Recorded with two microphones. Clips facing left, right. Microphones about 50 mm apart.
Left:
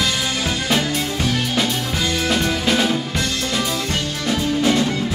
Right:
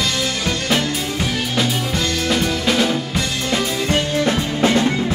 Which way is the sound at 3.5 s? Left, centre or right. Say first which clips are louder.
Right 6 dB; right.